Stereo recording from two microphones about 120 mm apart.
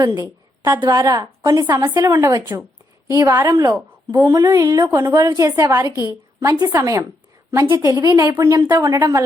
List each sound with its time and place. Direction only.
0.2 s a sound: 30° right (ahead or behind)
0.8 s a woman's voice: 35° right (ahead or behind)
1.9 s a woman's voice: 20° right (ahead or behind)